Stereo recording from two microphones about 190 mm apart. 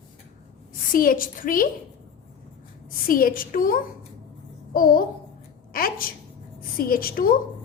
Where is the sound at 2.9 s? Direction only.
50° left (ahead or behind).